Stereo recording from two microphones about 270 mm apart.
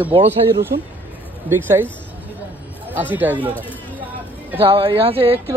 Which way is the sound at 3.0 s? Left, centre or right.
Centre.